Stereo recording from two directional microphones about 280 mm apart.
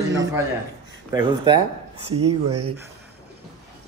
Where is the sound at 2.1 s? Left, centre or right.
Right.